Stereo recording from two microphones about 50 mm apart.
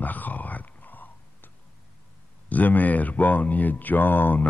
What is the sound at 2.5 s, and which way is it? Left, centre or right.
Speech, left.